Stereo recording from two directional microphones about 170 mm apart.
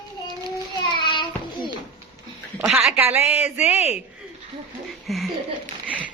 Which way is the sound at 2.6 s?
10° right (ahead or behind).